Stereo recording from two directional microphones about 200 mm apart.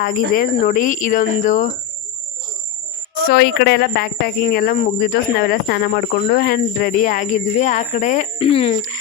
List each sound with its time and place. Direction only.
0.0 s speech: 45° left (ahead or behind)
3.2 s speech: 55° left (ahead or behind); by 8.7 s 30° left (ahead or behind)